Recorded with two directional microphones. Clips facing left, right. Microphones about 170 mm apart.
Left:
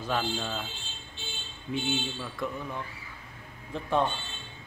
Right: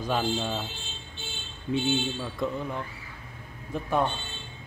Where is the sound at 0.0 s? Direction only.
15° right (ahead or behind).